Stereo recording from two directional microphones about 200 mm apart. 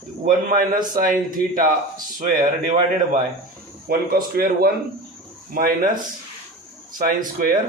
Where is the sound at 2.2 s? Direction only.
45° right (ahead or behind).